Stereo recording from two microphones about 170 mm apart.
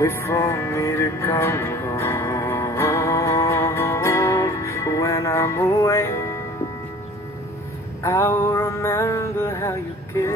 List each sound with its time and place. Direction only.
0.0 s music: 15° left (ahead or behind)
8.0 s mantra: 15° left (ahead or behind)